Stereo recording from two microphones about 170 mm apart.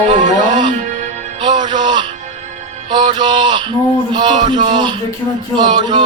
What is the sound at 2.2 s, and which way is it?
Music, 45° right (ahead or behind).